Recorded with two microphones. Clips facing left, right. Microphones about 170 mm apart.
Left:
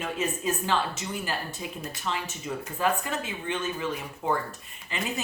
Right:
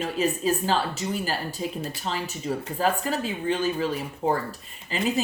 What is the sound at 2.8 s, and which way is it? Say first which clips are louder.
Speech: right 2 dB; 35° right (ahead or behind).